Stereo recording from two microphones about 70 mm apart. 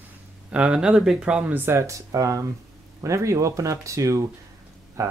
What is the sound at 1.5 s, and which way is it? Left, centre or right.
Speech, right.